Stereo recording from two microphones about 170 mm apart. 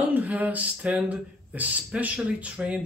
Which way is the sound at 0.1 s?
10° right (ahead or behind).